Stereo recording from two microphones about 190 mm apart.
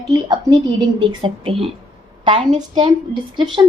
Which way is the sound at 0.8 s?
25° right (ahead or behind).